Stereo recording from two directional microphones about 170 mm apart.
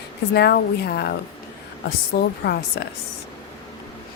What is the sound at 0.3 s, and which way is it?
Speech, 70° left (ahead or behind).